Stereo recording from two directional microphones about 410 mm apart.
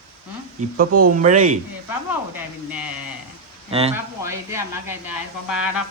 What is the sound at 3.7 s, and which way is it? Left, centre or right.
Speech, centre.